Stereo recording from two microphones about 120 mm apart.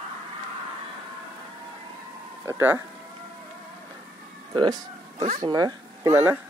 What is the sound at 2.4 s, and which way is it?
Speech, 20° right (ahead or behind).